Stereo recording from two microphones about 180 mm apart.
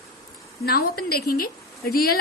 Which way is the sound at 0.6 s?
60° left (ahead or behind).